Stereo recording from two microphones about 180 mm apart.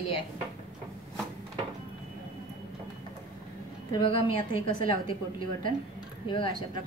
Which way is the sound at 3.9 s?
30° left (ahead or behind).